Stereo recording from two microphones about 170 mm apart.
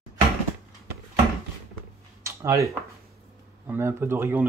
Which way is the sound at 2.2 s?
15° right (ahead or behind).